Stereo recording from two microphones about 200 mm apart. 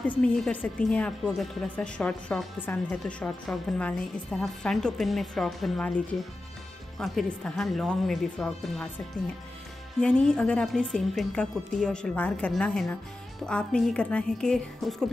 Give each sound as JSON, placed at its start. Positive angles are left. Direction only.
{"t": 0.0, "sound": "a woman's voice", "side_deg": 5}